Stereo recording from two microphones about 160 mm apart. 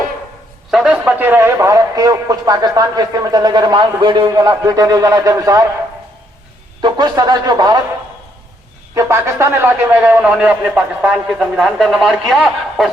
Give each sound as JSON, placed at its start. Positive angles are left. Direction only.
{"t": 0.7, "sound": "a man's voice", "side_deg": -5}
{"t": 6.8, "sound": "a man's voice", "side_deg": -25}
{"t": 9.0, "sound": "a man's voice", "side_deg": -15}